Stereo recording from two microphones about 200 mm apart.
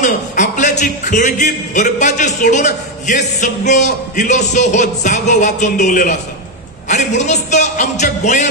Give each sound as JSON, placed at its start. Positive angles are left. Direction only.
{"t": 0.0, "sound": "a man's voice", "side_deg": 40}